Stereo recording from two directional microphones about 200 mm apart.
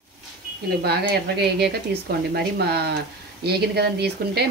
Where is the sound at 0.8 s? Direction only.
55° right (ahead or behind).